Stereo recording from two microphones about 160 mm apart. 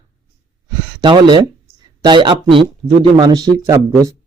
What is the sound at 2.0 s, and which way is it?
A man's voice, 30° right (ahead or behind).